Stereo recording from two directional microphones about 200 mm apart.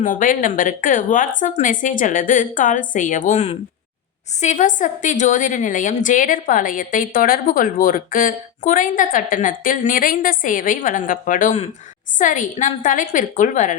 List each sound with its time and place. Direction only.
0.0 s a woman's voice: 40° left (ahead or behind)